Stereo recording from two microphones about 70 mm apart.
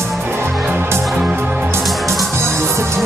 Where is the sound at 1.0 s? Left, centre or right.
Centre.